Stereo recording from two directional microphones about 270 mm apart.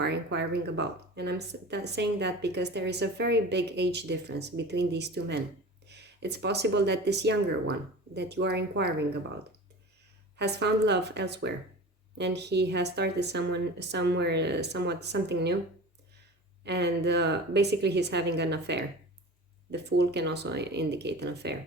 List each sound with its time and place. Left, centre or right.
0.0 s speech: right
10.3 s speech: right
16.6 s speech: right